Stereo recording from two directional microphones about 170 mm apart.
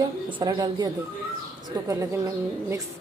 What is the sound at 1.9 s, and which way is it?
Speech, 20° right (ahead or behind).